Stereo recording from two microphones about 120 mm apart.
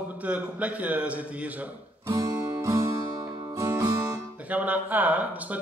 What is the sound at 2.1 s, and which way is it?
Music, 30° right (ahead or behind).